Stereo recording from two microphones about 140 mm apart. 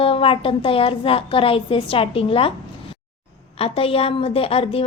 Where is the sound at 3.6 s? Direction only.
45° left (ahead or behind).